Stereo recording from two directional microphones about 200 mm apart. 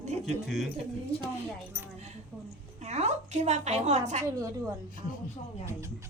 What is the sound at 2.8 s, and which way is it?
A woman's voice, 35° right (ahead or behind).